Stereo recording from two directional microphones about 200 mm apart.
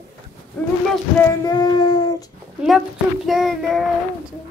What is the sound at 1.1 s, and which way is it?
Child singing, 20° left (ahead or behind).